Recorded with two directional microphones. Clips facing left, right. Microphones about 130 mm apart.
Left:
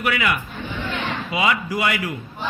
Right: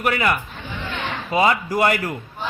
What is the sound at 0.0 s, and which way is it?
A man's voice, 40° right (ahead or behind).